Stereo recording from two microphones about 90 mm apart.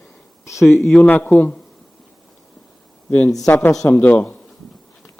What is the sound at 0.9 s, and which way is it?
Speech, 15° left (ahead or behind).